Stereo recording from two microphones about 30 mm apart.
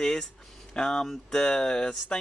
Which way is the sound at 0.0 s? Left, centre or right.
Left.